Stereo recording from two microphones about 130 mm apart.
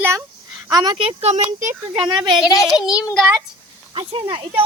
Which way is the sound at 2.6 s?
5° right (ahead or behind).